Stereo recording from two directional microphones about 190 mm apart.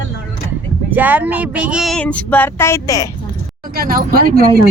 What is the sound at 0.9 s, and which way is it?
Speech, 10° right (ahead or behind).